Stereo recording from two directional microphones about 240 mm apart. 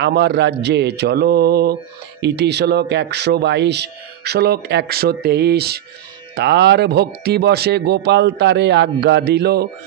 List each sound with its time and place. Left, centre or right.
0.0 s speech: right